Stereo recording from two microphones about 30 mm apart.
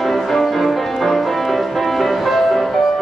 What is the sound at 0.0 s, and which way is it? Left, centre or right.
Music, centre.